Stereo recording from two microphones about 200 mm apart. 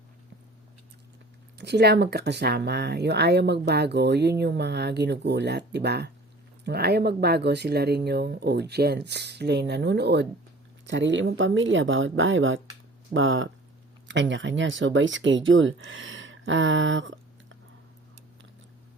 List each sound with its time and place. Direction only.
1.5 s speech: 55° right (ahead or behind); by 13.5 s 75° right (ahead or behind)
14.1 s speech: 65° right (ahead or behind)